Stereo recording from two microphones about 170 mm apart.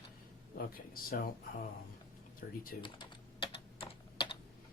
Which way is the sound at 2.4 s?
60° left (ahead or behind).